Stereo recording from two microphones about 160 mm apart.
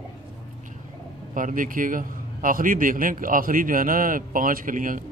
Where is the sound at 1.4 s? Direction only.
55° right (ahead or behind).